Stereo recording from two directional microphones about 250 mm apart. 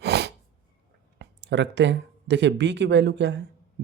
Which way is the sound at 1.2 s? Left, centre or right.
Right.